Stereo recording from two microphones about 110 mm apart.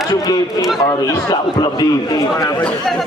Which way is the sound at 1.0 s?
40° left (ahead or behind).